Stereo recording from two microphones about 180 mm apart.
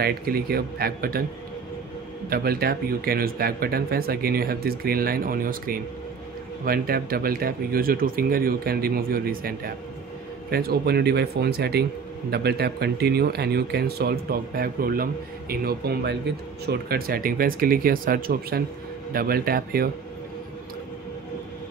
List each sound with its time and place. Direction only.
0.0 s speech: 60° right (ahead or behind)
2.2 s speech: 55° right (ahead or behind)